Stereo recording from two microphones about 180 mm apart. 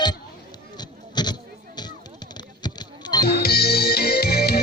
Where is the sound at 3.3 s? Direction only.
60° left (ahead or behind).